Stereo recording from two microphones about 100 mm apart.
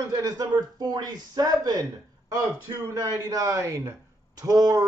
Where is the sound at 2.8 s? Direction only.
35° right (ahead or behind).